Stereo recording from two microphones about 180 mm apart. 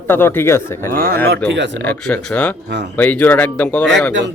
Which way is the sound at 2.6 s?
70° right (ahead or behind).